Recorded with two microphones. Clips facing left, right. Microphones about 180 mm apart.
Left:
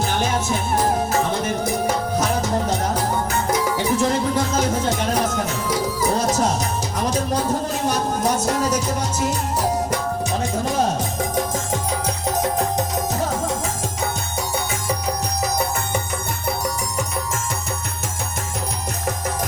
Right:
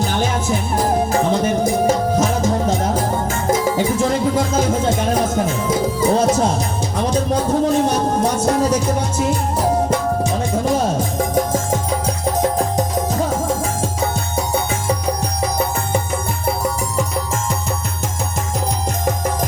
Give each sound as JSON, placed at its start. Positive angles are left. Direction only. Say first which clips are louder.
{"t": 2.4, "sound": "music", "louder": "right 4 dB", "side_deg": -50}
{"t": 5.5, "sound": "music", "louder": "right 4 dB", "side_deg": -25}
{"t": 12.4, "sound": "music", "louder": "right 3 dB", "side_deg": -35}
{"t": 15.4, "sound": "music", "louder": "right 3 dB", "side_deg": -30}